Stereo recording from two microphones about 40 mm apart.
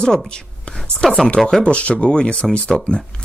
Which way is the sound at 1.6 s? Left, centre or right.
Left.